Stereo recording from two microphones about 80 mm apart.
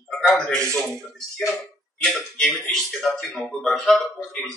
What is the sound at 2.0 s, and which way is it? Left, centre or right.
Speech, centre.